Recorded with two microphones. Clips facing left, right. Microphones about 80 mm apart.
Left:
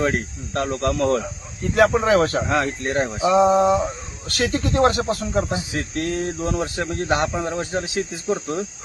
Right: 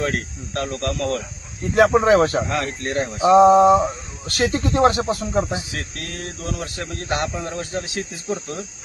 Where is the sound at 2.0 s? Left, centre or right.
Right.